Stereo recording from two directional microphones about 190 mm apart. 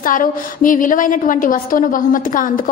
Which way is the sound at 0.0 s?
45° left (ahead or behind).